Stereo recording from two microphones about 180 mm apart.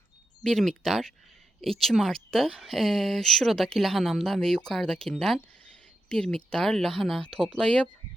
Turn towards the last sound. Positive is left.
turn(degrees=5)  # may be behind; listen again after turning